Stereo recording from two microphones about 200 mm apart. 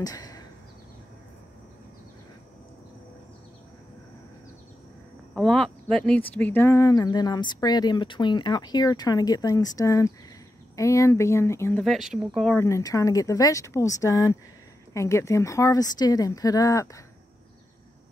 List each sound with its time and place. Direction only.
0.0 s a sound: 20° left (ahead or behind)
5.3 s speech: 5° left (ahead or behind)
11.8 s speech: centre (ahead or behind)
12.5 s speech: 15° left (ahead or behind)